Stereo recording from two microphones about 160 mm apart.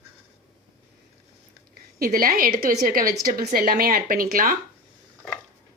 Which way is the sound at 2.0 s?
65° right (ahead or behind).